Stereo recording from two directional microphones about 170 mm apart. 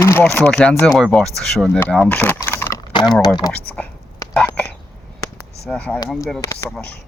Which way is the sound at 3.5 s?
10° left (ahead or behind).